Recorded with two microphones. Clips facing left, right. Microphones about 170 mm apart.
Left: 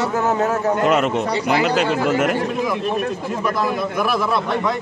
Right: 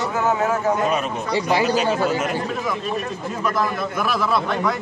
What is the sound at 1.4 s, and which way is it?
Speech, 70° left (ahead or behind).